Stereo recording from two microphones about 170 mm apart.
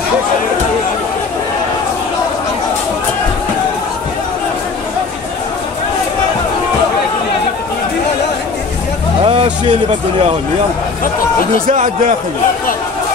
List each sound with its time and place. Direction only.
9.2 s vehicle: 30° right (ahead or behind)
11.6 s a man's voice: 50° right (ahead or behind)